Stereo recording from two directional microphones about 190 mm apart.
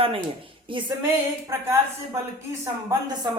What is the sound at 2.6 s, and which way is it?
Speech, 15° right (ahead or behind).